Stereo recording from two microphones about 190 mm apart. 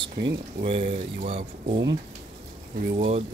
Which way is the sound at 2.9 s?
35° right (ahead or behind).